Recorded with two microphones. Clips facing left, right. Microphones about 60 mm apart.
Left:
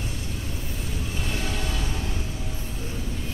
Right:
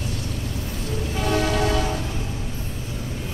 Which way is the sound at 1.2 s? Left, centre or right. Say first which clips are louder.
Right 11 dB; right.